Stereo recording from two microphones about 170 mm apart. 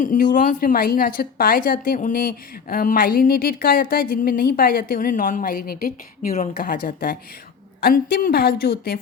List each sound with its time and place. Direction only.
0.0 s a woman's voice: 50° left (ahead or behind); by 9.0 s 65° left (ahead or behind)